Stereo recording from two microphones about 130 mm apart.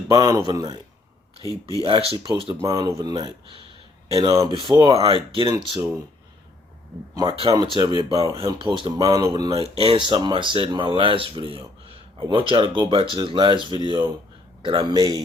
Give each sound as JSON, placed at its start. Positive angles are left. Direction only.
{"t": 0.1, "sound": "speech", "side_deg": -30}
{"t": 1.4, "sound": "speech", "side_deg": 25}
{"t": 1.8, "sound": "speech", "side_deg": -45}
{"t": 2.1, "sound": "speech", "side_deg": -30}
{"t": 5.1, "sound": "speech", "side_deg": -40}
{"t": 7.1, "sound": "speech", "side_deg": -30}
{"t": 9.6, "sound": "speech", "side_deg": -45}